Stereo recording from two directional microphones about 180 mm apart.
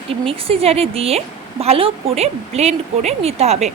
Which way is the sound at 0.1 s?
30° right (ahead or behind).